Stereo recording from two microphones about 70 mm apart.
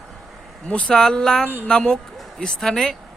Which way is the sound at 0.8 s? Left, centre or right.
Centre.